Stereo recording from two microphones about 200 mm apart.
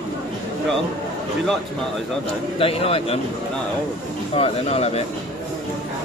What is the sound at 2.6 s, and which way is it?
Speech, 30° left (ahead or behind).